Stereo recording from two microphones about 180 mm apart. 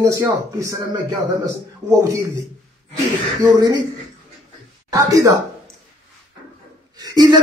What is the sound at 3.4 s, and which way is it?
Speech, 20° right (ahead or behind).